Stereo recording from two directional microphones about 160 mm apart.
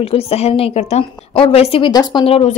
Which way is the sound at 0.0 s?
40° left (ahead or behind).